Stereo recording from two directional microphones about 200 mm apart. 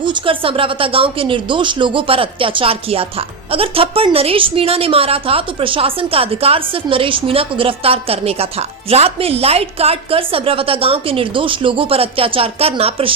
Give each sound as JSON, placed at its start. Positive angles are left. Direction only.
{"t": 0.0, "sound": "speech", "side_deg": -25}